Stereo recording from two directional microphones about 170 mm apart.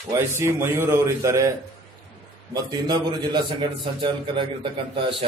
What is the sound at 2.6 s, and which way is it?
A man's voice, 25° right (ahead or behind).